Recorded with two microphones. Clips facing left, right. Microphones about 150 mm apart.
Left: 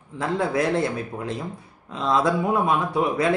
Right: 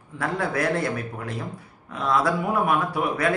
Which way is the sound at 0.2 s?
20° left (ahead or behind).